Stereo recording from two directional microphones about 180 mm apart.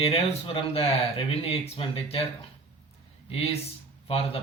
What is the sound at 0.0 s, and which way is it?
Speech, 30° left (ahead or behind).